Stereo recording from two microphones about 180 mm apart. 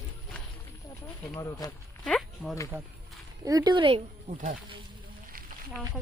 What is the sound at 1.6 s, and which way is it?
Speech, 20° left (ahead or behind).